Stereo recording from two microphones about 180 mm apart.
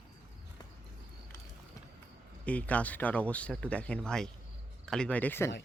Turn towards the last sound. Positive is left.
turn(degrees=10)  # may be behind; listen again after turning